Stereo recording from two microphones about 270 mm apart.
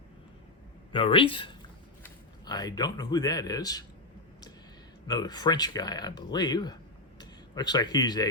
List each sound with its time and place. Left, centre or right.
0.9 s speech: centre
5.0 s speech: centre